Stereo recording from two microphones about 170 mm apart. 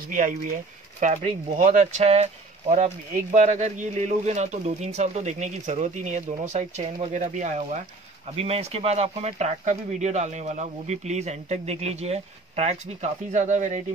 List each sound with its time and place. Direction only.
1.0 s speech: 45° right (ahead or behind)